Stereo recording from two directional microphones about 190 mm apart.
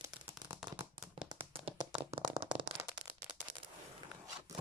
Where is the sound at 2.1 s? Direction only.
30° right (ahead or behind).